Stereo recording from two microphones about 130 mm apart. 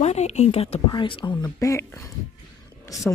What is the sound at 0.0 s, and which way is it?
Speech, 60° left (ahead or behind).